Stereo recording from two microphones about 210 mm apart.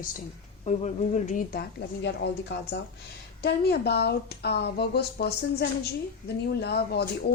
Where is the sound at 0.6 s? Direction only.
35° left (ahead or behind).